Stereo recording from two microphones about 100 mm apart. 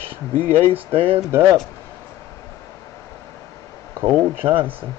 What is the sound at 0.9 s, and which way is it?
Speech, 70° right (ahead or behind).